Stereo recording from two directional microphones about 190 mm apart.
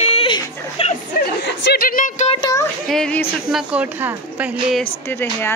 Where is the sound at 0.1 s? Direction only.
30° left (ahead or behind).